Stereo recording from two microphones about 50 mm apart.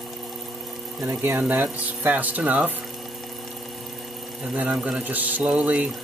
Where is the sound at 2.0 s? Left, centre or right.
Right.